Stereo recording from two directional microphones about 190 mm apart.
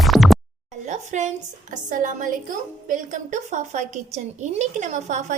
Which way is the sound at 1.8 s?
40° right (ahead or behind).